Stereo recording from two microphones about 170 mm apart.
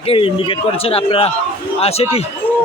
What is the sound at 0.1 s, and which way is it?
A man's voice, 30° left (ahead or behind).